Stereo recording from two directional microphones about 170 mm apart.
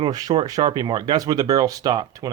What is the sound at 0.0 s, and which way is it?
Speech, 20° right (ahead or behind).